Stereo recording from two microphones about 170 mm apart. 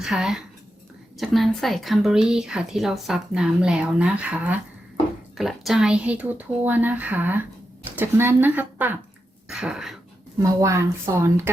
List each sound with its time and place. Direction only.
0.0 s a woman's voice: centre (ahead or behind)
10.4 s a woman's voice: 15° right (ahead or behind)